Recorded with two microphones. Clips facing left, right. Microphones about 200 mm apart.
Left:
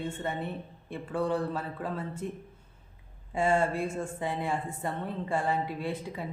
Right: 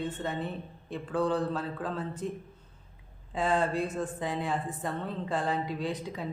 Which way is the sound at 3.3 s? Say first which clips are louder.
Left 2 dB; 10° left (ahead or behind).